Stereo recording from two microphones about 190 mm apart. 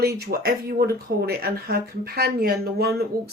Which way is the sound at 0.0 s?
55° right (ahead or behind).